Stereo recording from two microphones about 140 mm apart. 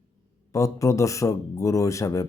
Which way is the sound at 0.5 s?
20° left (ahead or behind).